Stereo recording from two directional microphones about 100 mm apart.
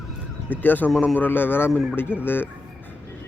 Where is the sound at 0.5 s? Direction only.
20° left (ahead or behind).